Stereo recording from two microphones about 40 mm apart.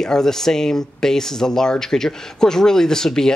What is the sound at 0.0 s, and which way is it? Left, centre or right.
Speech, centre.